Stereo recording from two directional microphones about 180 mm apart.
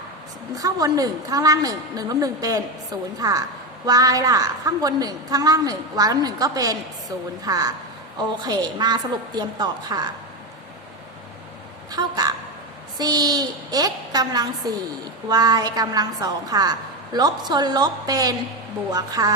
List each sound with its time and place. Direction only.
0.5 s a woman's voice: 20° right (ahead or behind)
11.9 s a sound: 20° right (ahead or behind)
13.0 s a woman's voice: 20° right (ahead or behind)